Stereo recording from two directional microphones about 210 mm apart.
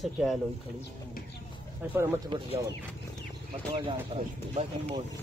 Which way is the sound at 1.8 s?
10° right (ahead or behind).